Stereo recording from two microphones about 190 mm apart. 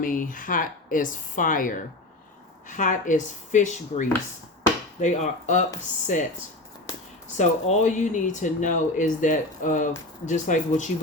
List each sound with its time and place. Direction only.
0.0 s speech: 45° left (ahead or behind)
7.3 s speech: 40° left (ahead or behind)